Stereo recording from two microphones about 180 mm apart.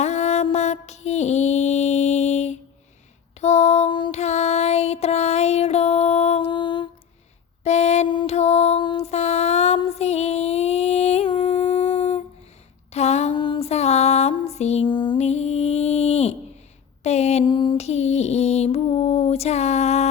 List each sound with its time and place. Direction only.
0.0 s music: 40° left (ahead or behind)
7.6 s mantra: 40° left (ahead or behind)
11.7 s dog: 40° left (ahead or behind)
12.9 s a sound: 35° left (ahead or behind)
13.4 s music: 30° left (ahead or behind)
17.0 s a sound: 35° left (ahead or behind)
17.5 s music: 25° left (ahead or behind)